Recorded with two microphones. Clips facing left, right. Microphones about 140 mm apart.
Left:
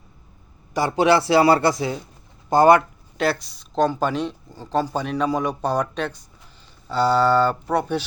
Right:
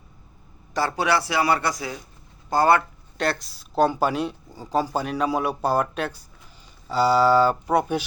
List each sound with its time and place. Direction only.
0.7 s a man's voice: 15° left (ahead or behind)
3.2 s speech: centre (ahead or behind)